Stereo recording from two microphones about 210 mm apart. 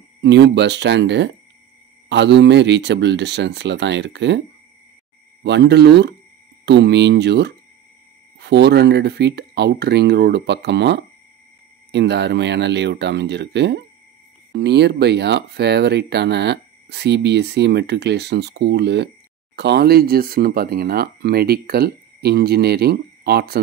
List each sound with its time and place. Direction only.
0.2 s speech: 55° right (ahead or behind)
5.4 s speech: 55° right (ahead or behind)